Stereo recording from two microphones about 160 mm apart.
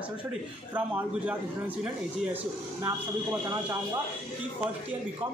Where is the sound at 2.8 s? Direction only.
20° right (ahead or behind).